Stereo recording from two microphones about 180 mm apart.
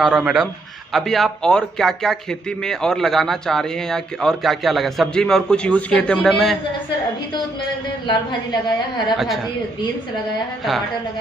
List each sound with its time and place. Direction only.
0.0 s a man's voice: 5° right (ahead or behind)
8.1 s a woman's voice: 25° left (ahead or behind)
9.1 s a man's voice: centre (ahead or behind)